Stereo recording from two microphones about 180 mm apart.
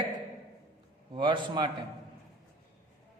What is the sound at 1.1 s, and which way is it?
Speech, 25° right (ahead or behind).